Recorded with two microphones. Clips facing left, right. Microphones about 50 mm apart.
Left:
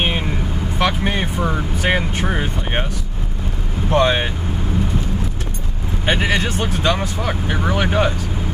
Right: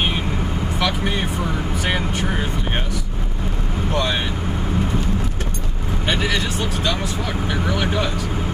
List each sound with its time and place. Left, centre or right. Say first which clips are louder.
0.7 s vehicle: left 4 dB; left
2.2 s speech: left 1 dB; left
3.9 s speech: left 7 dB; left
6.0 s speech: left 3 dB; left